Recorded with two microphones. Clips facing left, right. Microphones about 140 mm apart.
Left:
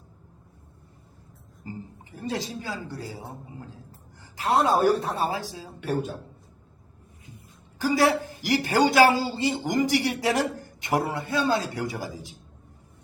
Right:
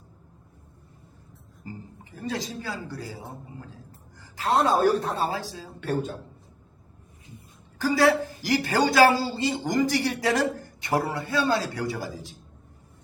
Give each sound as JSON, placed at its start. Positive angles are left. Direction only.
{"t": 2.1, "sound": "a man's voice", "side_deg": 20}
{"t": 4.2, "sound": "a sound", "side_deg": 20}
{"t": 4.5, "sound": "speech", "side_deg": 5}
{"t": 5.3, "sound": "a woman's voice", "side_deg": 15}
{"t": 7.8, "sound": "a woman's voice", "side_deg": 15}